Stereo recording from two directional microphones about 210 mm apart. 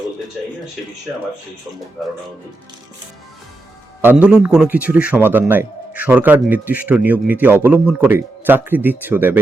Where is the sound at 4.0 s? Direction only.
10° right (ahead or behind).